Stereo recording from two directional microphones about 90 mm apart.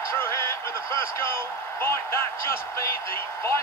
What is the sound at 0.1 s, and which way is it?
Speech, 30° left (ahead or behind).